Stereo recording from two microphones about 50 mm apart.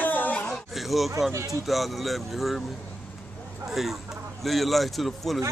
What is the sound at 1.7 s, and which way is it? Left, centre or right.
Speech, centre.